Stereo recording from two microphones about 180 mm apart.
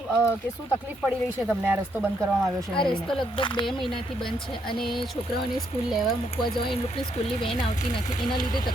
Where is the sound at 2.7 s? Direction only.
25° left (ahead or behind).